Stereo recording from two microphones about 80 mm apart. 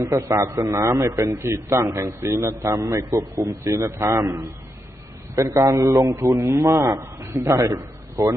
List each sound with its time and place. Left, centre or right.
0.0 s a man's voice: right